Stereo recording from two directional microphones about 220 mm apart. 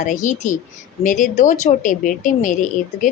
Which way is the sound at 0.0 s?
35° left (ahead or behind).